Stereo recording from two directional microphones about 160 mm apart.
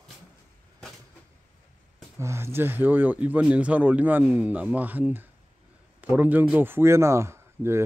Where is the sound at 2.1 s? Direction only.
15° right (ahead or behind).